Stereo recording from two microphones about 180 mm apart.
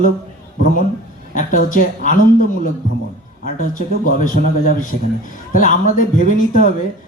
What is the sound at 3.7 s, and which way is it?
Speech, 50° left (ahead or behind).